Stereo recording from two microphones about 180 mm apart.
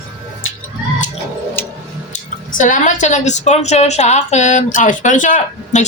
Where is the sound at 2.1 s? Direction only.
45° left (ahead or behind).